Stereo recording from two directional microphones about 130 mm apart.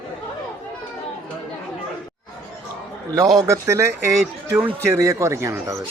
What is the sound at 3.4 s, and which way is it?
Speech, 25° right (ahead or behind).